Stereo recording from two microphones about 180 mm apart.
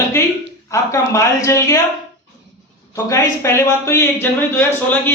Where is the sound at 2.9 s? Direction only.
15° left (ahead or behind).